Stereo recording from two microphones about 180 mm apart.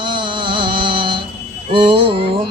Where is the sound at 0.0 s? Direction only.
25° right (ahead or behind).